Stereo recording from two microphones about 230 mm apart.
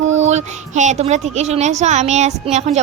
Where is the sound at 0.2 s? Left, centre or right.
Right.